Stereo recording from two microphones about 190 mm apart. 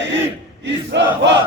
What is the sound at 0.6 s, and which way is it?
Crowd, 65° right (ahead or behind).